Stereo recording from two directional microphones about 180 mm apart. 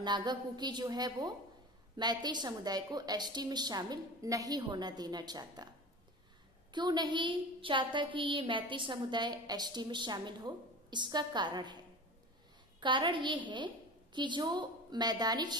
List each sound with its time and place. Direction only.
0.0 s a woman's voice: 25° right (ahead or behind)
6.7 s a woman's voice: 25° right (ahead or behind)
12.8 s a woman's voice: 25° right (ahead or behind)